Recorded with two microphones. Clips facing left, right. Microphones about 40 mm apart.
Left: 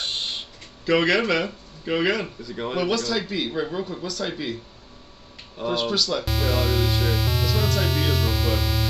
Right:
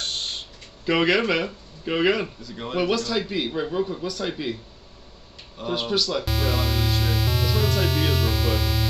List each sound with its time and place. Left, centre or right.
0.0 s a sound: left
0.8 s a man's voice: centre
2.2 s speech: centre
2.9 s a man's voice: centre
5.8 s a man's voice: centre
6.1 s music: centre